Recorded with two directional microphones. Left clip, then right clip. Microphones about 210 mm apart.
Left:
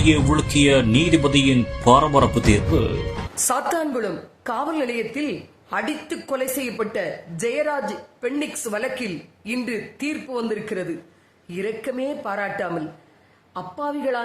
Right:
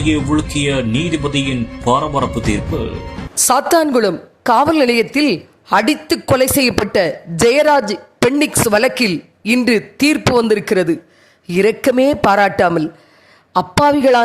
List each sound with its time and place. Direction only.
0.0 s speech: centre (ahead or behind)
3.4 s a woman's voice: 40° right (ahead or behind)